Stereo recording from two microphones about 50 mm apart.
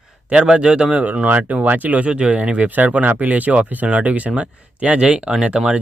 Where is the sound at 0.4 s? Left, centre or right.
Centre.